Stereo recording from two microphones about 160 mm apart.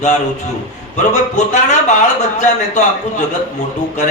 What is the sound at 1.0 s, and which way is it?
Speech, 50° left (ahead or behind).